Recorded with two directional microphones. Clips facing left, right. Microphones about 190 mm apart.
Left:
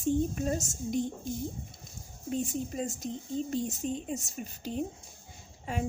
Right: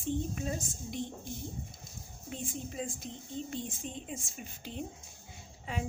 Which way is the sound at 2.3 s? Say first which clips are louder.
Left 8 dB; 45° left (ahead or behind).